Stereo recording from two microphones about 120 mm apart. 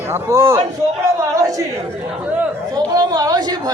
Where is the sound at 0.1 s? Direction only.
25° right (ahead or behind).